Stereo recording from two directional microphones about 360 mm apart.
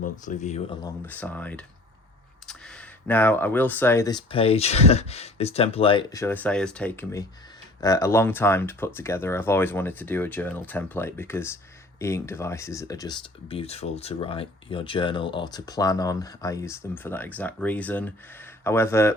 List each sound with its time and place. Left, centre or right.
0.0 s speech: centre
1.0 s speech: centre